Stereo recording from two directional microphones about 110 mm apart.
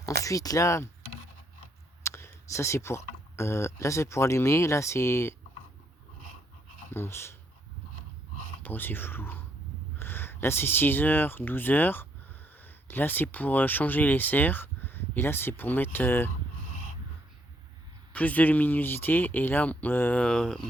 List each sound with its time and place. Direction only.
0.0 s speech: 30° left (ahead or behind)
2.0 s a sound: 25° left (ahead or behind)
3.3 s speech: 25° left (ahead or behind)
6.9 s speech: 20° left (ahead or behind)
8.6 s speech: 20° left (ahead or behind)
18.1 s speech: 15° left (ahead or behind)